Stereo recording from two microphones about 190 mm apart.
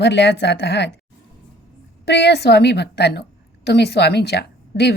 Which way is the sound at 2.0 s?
60° left (ahead or behind).